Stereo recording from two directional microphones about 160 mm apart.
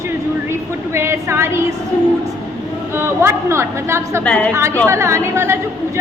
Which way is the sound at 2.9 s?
15° right (ahead or behind).